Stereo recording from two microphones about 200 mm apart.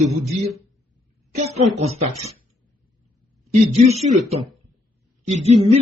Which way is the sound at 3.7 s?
30° right (ahead or behind).